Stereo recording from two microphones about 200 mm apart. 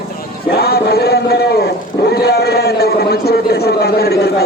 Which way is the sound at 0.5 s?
50° left (ahead or behind).